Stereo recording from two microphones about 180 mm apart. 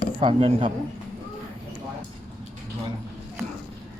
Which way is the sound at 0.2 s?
30° right (ahead or behind).